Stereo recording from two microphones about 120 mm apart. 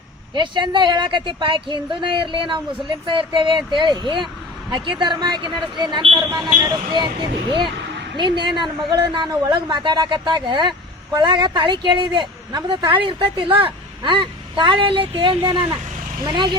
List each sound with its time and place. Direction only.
0.3 s a woman's voice: 40° right (ahead or behind)
6.1 s a woman's voice: 30° right (ahead or behind)
8.1 s a woman's voice: 40° right (ahead or behind)